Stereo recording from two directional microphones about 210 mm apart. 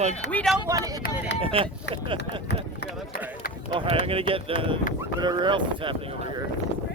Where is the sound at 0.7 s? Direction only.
15° right (ahead or behind).